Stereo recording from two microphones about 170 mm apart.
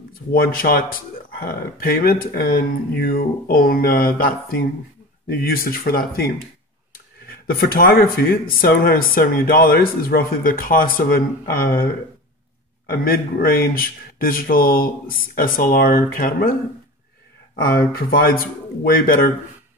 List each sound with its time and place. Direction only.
0.3 s speech: 60° left (ahead or behind)
7.4 s speech: 60° left (ahead or behind)
12.9 s speech: 60° left (ahead or behind)
17.9 s speech: 60° left (ahead or behind)